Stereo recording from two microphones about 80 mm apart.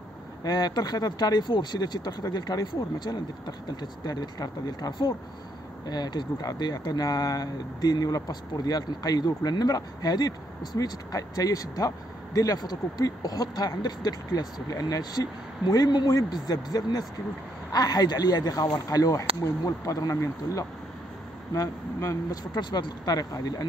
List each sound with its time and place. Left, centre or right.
0.4 s speech: left
22.5 s speech: left